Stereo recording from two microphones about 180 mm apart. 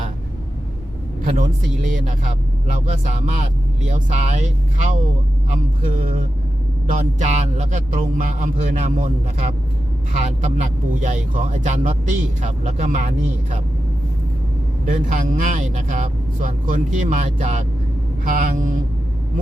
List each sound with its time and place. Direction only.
1.2 s speech: 45° right (ahead or behind)
3.8 s speech: 45° right (ahead or behind)
10.6 s speech: 45° right (ahead or behind)
14.8 s speech: 45° right (ahead or behind)